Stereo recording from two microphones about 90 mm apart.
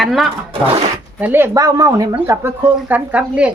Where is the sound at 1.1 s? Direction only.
20° right (ahead or behind).